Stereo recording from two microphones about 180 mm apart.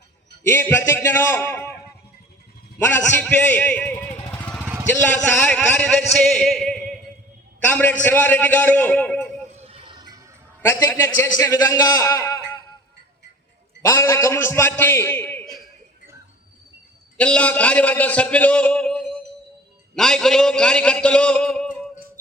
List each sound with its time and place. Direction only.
0.5 s a man's voice: 15° left (ahead or behind)
2.7 s a man's voice: 10° left (ahead or behind)
4.3 s vehicle: 10° left (ahead or behind)
4.6 s vehicle: 10° right (ahead or behind)
5.0 s a sound: 10° left (ahead or behind)
7.6 s a man's voice: 10° left (ahead or behind)
9.5 s a sound: 35° right (ahead or behind)
10.6 s a man's voice: 15° left (ahead or behind)
13.8 s a man's voice: 15° left (ahead or behind)
17.2 s a man's voice: 5° left (ahead or behind)
20.0 s a sound: 5° left (ahead or behind)